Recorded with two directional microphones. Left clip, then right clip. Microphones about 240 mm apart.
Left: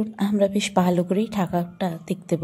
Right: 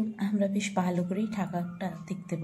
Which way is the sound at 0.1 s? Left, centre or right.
Left.